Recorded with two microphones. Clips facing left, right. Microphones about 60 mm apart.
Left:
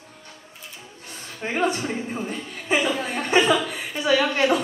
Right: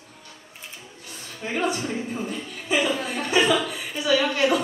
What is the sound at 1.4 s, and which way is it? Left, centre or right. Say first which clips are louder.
Speech: left 2 dB; left.